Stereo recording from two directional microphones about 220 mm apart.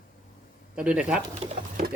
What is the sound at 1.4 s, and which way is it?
Speech, 35° right (ahead or behind).